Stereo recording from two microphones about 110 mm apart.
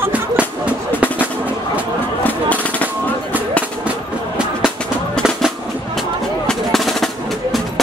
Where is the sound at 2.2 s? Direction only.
15° left (ahead or behind).